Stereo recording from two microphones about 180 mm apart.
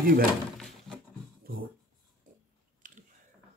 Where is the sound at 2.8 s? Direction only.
45° right (ahead or behind).